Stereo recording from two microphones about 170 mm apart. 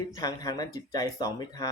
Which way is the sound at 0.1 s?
25° left (ahead or behind).